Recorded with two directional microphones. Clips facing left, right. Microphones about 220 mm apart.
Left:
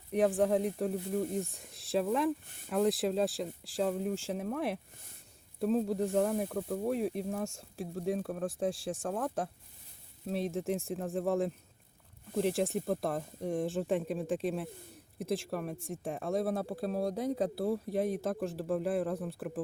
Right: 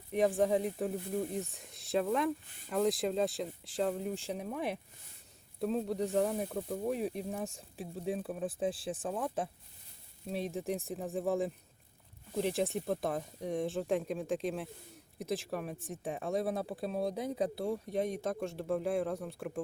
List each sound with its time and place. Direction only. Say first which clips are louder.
0.1 s speech: left 1 dB; centre (ahead or behind)